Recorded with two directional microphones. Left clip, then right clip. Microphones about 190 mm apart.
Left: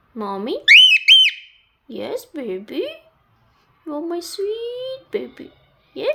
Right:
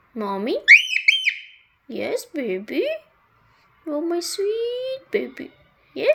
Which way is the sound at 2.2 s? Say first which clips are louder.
Right 2 dB; 40° left (ahead or behind).